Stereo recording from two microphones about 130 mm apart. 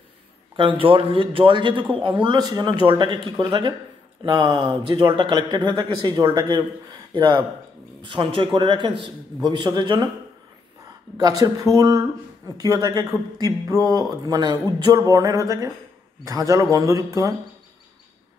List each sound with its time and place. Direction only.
0.6 s speech: 40° right (ahead or behind)
11.1 s a man's voice: 30° right (ahead or behind)